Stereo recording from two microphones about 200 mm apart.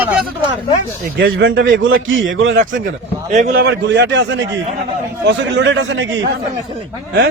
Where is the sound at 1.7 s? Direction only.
75° right (ahead or behind).